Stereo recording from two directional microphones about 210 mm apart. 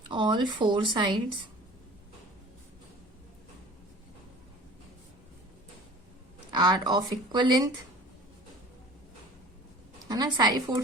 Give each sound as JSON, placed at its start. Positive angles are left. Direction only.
{"t": 0.1, "sound": "speech", "side_deg": -20}
{"t": 6.5, "sound": "speech", "side_deg": -20}
{"t": 10.1, "sound": "speech", "side_deg": -20}